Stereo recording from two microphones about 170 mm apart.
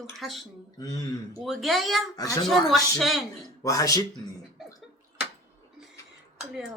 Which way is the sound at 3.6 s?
20° left (ahead or behind).